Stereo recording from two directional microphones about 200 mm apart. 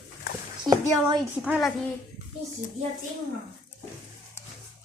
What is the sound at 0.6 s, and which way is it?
Speech, 20° right (ahead or behind).